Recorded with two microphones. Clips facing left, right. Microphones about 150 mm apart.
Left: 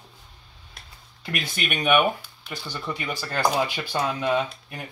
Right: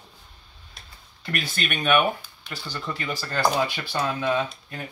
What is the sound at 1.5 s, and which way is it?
Speech, 15° left (ahead or behind).